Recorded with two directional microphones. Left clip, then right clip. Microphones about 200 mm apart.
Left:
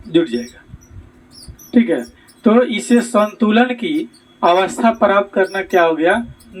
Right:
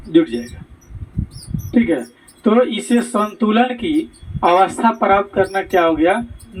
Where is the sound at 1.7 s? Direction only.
40° left (ahead or behind).